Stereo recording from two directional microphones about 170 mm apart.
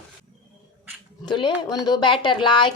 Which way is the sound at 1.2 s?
25° left (ahead or behind).